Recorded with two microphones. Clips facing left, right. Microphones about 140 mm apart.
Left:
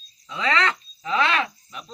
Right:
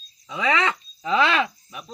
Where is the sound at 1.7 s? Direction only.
10° right (ahead or behind).